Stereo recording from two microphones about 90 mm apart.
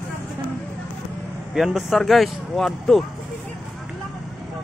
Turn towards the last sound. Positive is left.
turn(degrees=0)  # may be behind; listen again after turning